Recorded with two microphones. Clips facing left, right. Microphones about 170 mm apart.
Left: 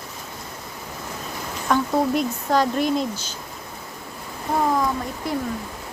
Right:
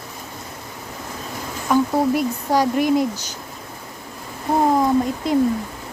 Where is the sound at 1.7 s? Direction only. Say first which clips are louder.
Right 3 dB; 10° right (ahead or behind).